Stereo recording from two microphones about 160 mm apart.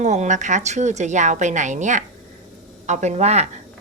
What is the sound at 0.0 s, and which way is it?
A woman's voice, 45° right (ahead or behind).